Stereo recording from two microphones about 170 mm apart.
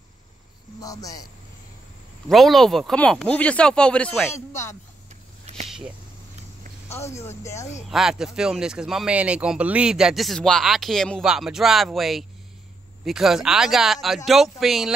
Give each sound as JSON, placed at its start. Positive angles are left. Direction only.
{"t": 0.7, "sound": "speech", "side_deg": 20}
{"t": 2.2, "sound": "speech", "side_deg": 0}
{"t": 5.4, "sound": "a sound", "side_deg": -40}
{"t": 6.9, "sound": "speech", "side_deg": 15}
{"t": 7.9, "sound": "speech", "side_deg": -5}